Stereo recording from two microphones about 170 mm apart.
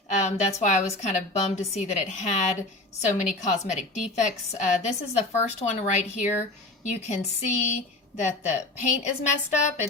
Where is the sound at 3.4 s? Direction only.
40° left (ahead or behind).